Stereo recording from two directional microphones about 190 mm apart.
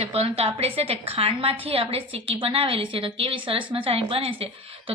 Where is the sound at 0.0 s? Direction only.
30° right (ahead or behind).